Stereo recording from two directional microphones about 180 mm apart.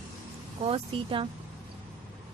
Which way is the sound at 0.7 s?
30° right (ahead or behind).